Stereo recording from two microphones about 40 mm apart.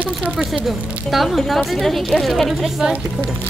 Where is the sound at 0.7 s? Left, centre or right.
Centre.